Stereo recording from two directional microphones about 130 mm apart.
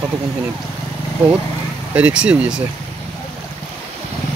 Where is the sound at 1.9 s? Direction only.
10° right (ahead or behind).